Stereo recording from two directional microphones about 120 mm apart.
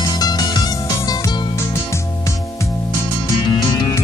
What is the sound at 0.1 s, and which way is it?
Music, 35° left (ahead or behind).